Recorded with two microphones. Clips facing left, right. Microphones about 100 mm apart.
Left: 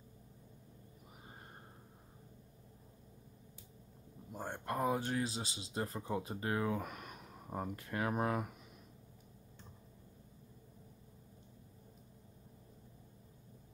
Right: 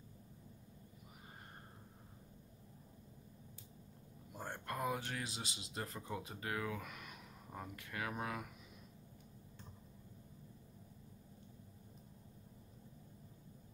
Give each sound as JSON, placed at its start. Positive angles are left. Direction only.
{"t": 4.4, "sound": "speech", "side_deg": 20}